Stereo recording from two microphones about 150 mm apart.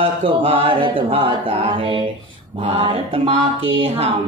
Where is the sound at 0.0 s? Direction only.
40° right (ahead or behind).